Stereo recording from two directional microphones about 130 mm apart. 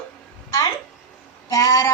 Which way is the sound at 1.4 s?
25° left (ahead or behind).